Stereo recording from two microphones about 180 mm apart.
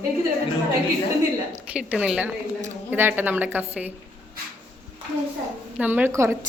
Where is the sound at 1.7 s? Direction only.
5° right (ahead or behind).